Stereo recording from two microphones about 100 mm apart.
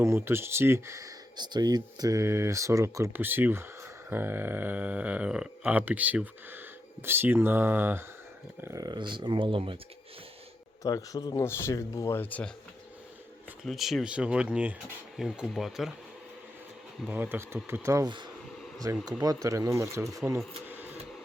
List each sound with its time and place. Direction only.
0.0 s speech: 25° right (ahead or behind)
1.4 s speech: 45° right (ahead or behind); by 8.0 s 20° right (ahead or behind)
8.6 s speech: 35° right (ahead or behind); by 9.7 s 60° right (ahead or behind)
10.8 s speech: 35° left (ahead or behind)
12.2 s speech: 15° left (ahead or behind)
13.7 s speech: centre (ahead or behind)
15.1 s speech: 5° right (ahead or behind)
17.1 s speech: 20° right (ahead or behind)
18.0 s speech: 50° right (ahead or behind)
18.8 s speech: 30° right (ahead or behind)
20.7 s a sound: 20° right (ahead or behind)